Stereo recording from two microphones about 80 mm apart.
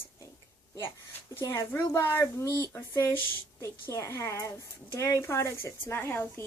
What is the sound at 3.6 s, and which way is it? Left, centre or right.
Speech, left.